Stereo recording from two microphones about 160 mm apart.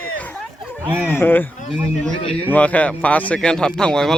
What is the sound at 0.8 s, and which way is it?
Speech, 15° right (ahead or behind).